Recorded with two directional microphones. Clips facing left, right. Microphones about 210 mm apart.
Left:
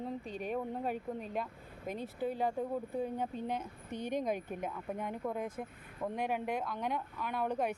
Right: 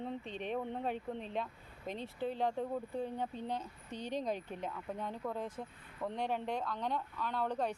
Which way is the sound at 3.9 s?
50° left (ahead or behind).